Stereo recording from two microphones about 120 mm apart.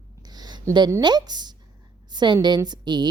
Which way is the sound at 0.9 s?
30° right (ahead or behind).